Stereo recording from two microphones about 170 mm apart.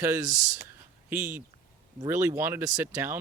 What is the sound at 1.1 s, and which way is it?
A man's voice, 10° right (ahead or behind).